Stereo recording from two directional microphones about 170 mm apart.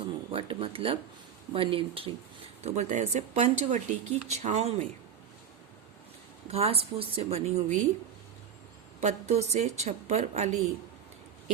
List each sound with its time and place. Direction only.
0.3 s speech: 30° right (ahead or behind)
6.5 s speech: 35° right (ahead or behind)
9.0 s speech: 40° right (ahead or behind)